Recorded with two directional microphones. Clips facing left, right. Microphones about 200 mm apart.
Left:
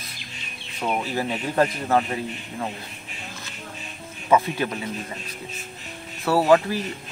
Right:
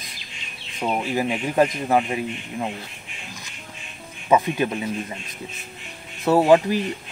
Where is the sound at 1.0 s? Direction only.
15° right (ahead or behind).